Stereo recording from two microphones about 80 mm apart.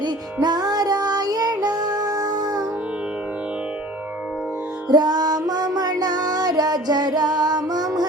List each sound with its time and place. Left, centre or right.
0.4 s music: right
4.9 s music: right